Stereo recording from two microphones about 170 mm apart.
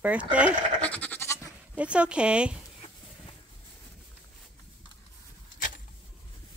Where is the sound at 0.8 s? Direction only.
10° left (ahead or behind).